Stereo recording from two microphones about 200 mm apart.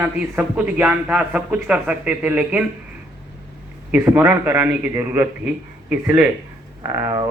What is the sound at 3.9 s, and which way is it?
A man's voice, 10° right (ahead or behind).